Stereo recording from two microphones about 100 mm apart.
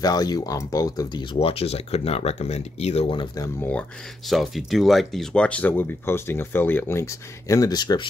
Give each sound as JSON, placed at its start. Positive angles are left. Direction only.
{"t": 0.0, "sound": "speech", "side_deg": 40}
{"t": 1.4, "sound": "speech", "side_deg": 75}
{"t": 4.3, "sound": "speech", "side_deg": 0}